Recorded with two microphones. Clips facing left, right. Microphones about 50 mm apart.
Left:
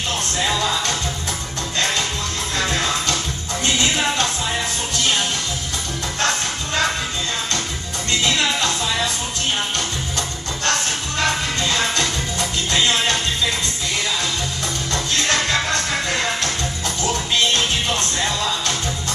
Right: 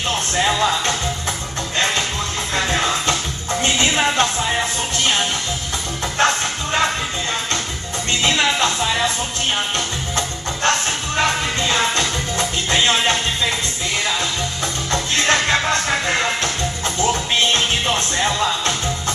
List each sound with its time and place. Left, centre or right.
0.4 s music: right
2.5 s music: right
8.1 s music: right
10.1 s music: right
14.9 s music: right